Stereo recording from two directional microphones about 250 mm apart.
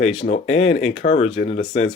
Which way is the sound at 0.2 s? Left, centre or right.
Left.